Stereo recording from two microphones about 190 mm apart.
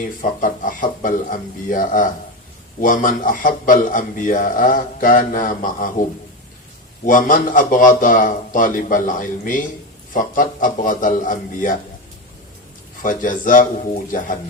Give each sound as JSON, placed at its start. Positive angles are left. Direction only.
{"t": 0.2, "sound": "a man's voice", "side_deg": 45}
{"t": 13.0, "sound": "a man's voice", "side_deg": 45}